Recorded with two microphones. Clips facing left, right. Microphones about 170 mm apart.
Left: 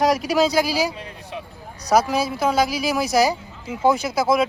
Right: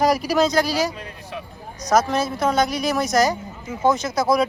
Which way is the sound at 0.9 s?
20° left (ahead or behind).